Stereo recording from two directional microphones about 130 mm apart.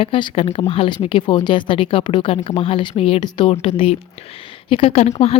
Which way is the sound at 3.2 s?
35° left (ahead or behind).